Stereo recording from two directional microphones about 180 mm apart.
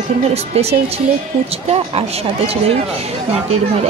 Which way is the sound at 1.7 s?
35° right (ahead or behind).